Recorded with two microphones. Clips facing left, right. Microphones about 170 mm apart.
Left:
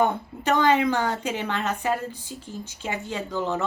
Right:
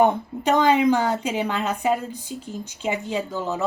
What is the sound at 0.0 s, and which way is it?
A woman's voice, 15° right (ahead or behind).